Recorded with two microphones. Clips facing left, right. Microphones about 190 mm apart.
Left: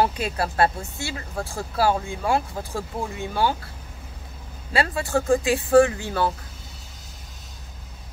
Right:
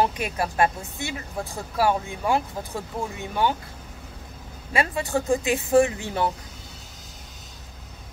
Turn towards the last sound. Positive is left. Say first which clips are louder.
# left 2 dB
turn(degrees=-20)  # may be behind; listen again after turning